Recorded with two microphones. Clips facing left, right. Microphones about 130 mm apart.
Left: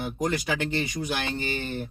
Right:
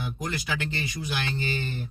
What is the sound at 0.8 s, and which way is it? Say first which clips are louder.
Speech: left 2 dB; 50° left (ahead or behind).